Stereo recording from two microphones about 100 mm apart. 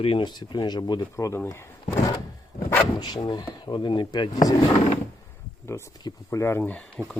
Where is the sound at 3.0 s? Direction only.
45° left (ahead or behind).